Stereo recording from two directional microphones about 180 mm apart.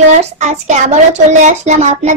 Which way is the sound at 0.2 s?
40° right (ahead or behind).